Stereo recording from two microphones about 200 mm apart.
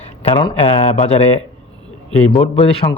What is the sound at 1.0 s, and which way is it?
Speech, 30° left (ahead or behind).